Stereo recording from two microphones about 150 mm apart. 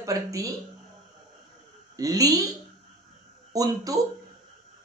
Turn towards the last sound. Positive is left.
turn(degrees=-25)  # may be behind; listen again after turning